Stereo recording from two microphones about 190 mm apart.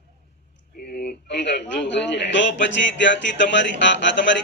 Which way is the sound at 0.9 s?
55° left (ahead or behind).